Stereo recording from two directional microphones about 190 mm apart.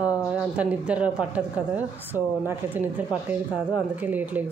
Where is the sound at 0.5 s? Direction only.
5° right (ahead or behind).